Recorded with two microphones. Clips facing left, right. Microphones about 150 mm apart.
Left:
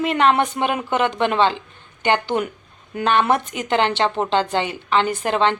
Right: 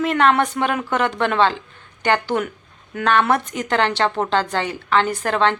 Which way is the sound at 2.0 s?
20° left (ahead or behind).